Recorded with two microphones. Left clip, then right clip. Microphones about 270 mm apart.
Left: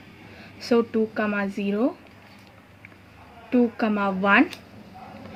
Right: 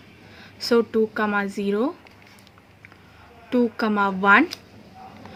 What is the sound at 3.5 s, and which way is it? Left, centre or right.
Speech, right.